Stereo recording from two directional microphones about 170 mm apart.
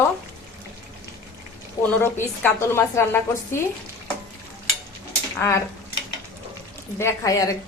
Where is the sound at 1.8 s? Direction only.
15° left (ahead or behind).